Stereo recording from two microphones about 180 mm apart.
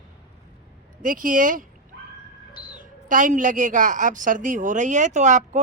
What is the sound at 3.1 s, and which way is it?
A woman's voice, 45° right (ahead or behind).